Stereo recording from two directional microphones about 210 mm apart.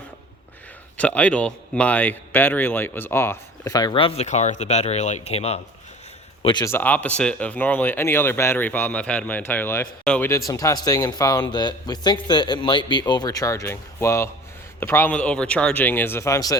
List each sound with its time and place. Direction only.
0.9 s a man's voice: 5° left (ahead or behind)